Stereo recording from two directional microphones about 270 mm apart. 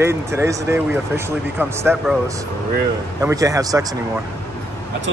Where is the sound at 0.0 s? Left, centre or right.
Centre.